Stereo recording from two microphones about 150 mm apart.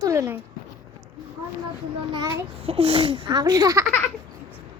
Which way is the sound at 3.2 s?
25° right (ahead or behind).